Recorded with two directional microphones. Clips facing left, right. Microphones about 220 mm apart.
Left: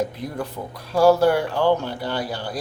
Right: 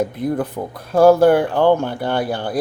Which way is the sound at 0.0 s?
55° right (ahead or behind).